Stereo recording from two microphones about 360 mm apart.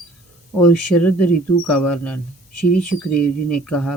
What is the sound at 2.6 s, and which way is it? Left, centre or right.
Speech, left.